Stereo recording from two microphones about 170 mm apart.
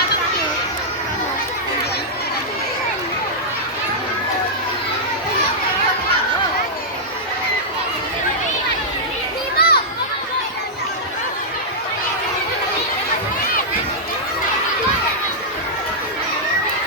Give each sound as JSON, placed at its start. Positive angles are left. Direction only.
{"t": 9.6, "sound": "children playing", "side_deg": 65}